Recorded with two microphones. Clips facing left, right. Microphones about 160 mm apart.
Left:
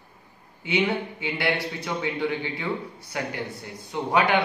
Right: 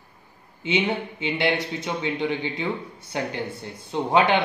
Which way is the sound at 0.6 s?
25° right (ahead or behind).